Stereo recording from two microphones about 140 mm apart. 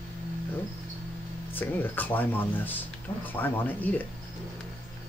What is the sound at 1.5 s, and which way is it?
Speech, 15° left (ahead or behind).